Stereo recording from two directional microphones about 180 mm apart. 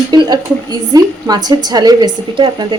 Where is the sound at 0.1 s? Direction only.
25° right (ahead or behind).